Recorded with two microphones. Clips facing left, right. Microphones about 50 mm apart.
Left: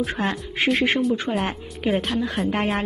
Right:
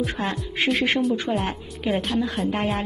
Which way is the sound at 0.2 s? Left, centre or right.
Left.